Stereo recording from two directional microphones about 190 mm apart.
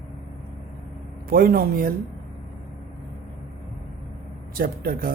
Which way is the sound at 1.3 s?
50° right (ahead or behind).